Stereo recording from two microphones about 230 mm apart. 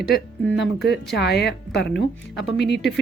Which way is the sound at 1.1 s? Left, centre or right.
Left.